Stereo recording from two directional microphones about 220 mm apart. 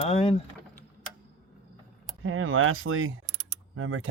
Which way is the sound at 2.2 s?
65° right (ahead or behind).